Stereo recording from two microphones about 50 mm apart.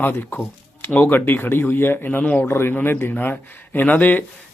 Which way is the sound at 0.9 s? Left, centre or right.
Left.